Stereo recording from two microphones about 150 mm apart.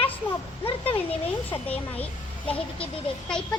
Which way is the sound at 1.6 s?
10° left (ahead or behind).